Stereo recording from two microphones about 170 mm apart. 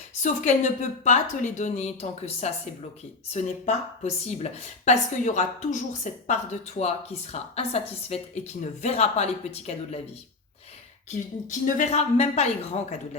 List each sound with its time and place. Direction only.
0.1 s a woman's voice: 45° left (ahead or behind)
11.1 s a woman's voice: 45° left (ahead or behind)